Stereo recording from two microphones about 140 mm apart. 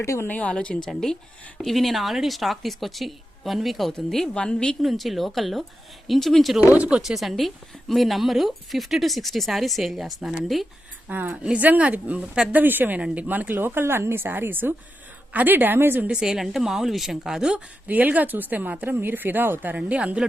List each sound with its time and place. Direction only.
0.0 s a woman's voice: 20° left (ahead or behind)
0.3 s a woman's voice: 10° left (ahead or behind)
11.1 s speech: 10° right (ahead or behind)